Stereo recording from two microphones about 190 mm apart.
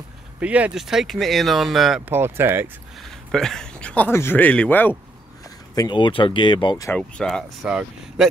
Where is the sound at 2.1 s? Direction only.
10° right (ahead or behind).